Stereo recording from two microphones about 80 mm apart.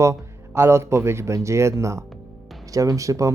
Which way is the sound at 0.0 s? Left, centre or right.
Right.